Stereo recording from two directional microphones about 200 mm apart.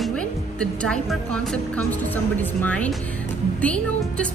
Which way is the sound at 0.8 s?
5° left (ahead or behind).